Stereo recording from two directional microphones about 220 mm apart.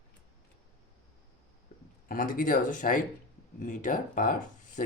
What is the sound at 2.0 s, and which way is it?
Speech, 40° left (ahead or behind).